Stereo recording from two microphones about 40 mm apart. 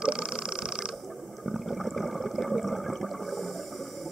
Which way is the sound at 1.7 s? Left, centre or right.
Centre.